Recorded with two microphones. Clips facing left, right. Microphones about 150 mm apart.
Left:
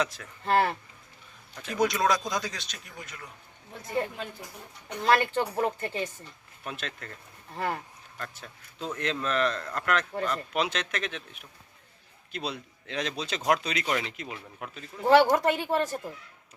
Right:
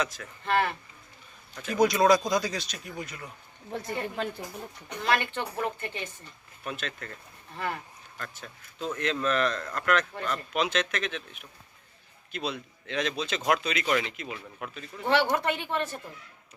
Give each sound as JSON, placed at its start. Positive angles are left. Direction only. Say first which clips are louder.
{"t": 0.0, "sound": "speech", "louder": "left 1 dB", "side_deg": 35}
{"t": 1.6, "sound": "speech", "louder": "right 4 dB", "side_deg": 0}
{"t": 3.7, "sound": "a woman's voice", "louder": "right 10 dB", "side_deg": -75}
{"t": 5.0, "sound": "speech", "louder": "left 4 dB", "side_deg": 40}
{"t": 9.0, "sound": "speech", "louder": "right 1 dB", "side_deg": 30}